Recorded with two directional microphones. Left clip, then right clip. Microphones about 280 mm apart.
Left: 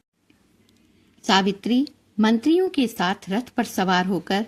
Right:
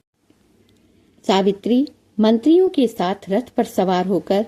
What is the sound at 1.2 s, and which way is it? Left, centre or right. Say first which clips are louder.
Speech: right 3 dB; left.